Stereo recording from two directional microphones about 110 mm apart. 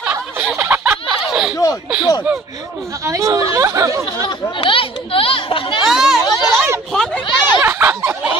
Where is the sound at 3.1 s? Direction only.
30° right (ahead or behind).